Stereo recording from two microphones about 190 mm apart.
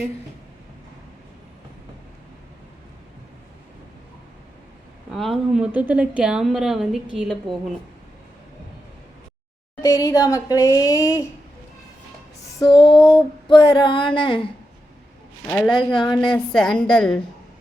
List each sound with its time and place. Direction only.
5.1 s a woman's voice: centre (ahead or behind)
9.8 s speech: 15° left (ahead or behind)
12.5 s music: 20° left (ahead or behind)
13.5 s a sound: 25° left (ahead or behind)
15.4 s a woman's voice: 5° left (ahead or behind)
15.7 s a sound: 25° left (ahead or behind)
16.3 s a woman's voice: 5° left (ahead or behind)